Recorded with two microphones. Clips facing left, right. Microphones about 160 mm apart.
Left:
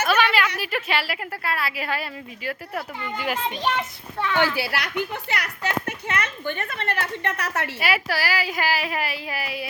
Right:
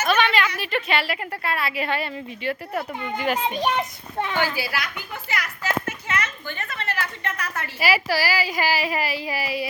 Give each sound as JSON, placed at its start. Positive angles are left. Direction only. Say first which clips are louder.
{"t": 0.0, "sound": "a sound", "louder": "even", "side_deg": 5}
{"t": 0.6, "sound": "speech", "louder": "right 2 dB", "side_deg": 5}
{"t": 3.3, "sound": "a child's voice", "louder": "right 1 dB", "side_deg": -15}
{"t": 4.4, "sound": "a woman's voice", "louder": "left 4 dB", "side_deg": 65}
{"t": 7.8, "sound": "speech", "louder": "right 5 dB", "side_deg": 0}